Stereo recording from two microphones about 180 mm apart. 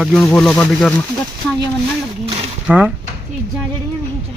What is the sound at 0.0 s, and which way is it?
Speech, 10° left (ahead or behind).